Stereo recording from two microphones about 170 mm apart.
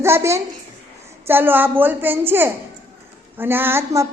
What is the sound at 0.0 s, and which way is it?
A woman's voice, 15° right (ahead or behind).